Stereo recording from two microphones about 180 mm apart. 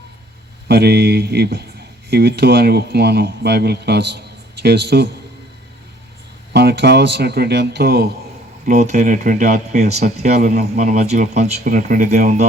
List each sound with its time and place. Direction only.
0.7 s speech: 65° right (ahead or behind)
6.5 s speech: 65° right (ahead or behind)
8.6 s speech: 40° right (ahead or behind)